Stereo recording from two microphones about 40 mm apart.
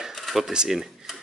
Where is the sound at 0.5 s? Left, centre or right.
Centre.